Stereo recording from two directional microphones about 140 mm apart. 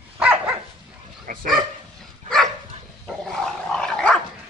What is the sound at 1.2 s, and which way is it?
Dog, 80° right.